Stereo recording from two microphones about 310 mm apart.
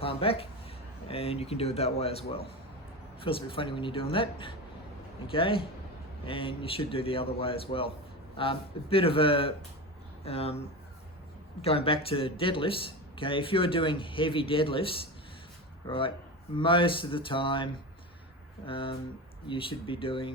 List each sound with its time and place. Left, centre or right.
0.0 s a sound: centre
1.0 s a man's voice: centre
11.6 s speech: centre